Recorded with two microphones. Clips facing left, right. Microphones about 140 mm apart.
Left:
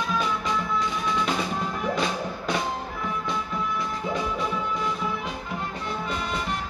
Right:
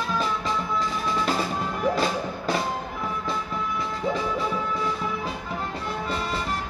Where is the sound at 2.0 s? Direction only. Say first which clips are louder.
Right 2 dB; centre (ahead or behind).